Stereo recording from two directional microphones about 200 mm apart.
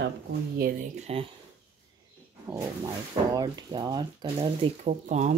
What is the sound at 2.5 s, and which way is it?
Speech, 15° right (ahead or behind).